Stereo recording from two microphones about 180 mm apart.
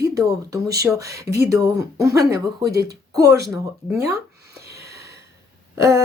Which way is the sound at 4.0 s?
20° right (ahead or behind).